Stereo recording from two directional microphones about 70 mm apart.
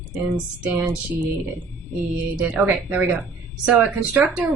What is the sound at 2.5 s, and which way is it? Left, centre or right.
Speech, right.